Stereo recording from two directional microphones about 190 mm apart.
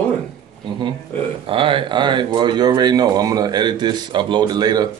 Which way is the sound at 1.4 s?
25° right (ahead or behind).